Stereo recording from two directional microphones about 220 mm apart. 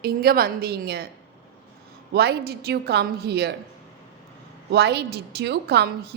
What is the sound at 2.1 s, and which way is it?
A woman's voice, 45° right (ahead or behind).